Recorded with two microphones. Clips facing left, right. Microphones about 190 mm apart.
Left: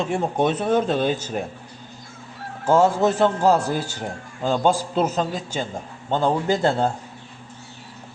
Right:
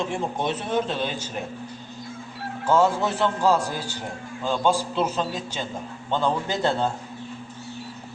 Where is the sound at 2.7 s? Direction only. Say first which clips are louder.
Left 3 dB; 45° left (ahead or behind).